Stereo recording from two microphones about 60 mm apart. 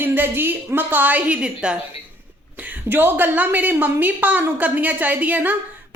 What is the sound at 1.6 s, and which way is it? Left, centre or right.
Speech, centre.